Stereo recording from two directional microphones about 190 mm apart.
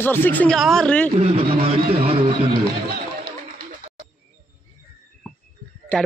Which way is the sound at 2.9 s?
50° right (ahead or behind).